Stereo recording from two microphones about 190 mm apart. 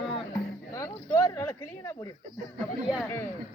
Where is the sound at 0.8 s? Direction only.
15° left (ahead or behind).